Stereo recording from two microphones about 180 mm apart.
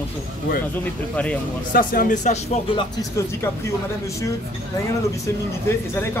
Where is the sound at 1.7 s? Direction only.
50° left (ahead or behind).